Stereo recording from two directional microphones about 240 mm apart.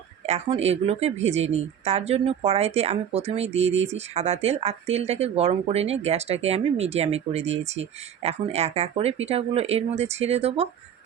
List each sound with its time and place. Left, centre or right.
0.3 s speech: right